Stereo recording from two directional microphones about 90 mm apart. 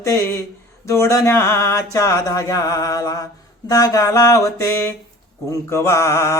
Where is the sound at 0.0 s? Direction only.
30° left (ahead or behind).